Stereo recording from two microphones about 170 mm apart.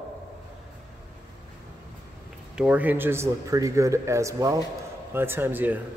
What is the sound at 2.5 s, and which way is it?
A man's voice, 5° right (ahead or behind).